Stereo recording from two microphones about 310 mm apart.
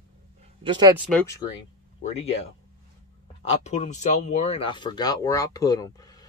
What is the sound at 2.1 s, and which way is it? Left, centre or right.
Speech, centre.